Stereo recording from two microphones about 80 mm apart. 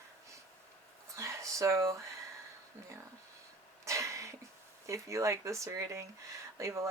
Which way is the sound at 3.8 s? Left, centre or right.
Right.